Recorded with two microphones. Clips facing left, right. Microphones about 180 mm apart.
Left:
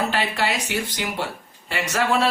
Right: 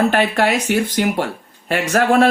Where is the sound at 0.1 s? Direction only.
55° right (ahead or behind).